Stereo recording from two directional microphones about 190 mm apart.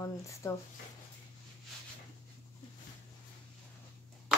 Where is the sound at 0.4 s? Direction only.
15° left (ahead or behind).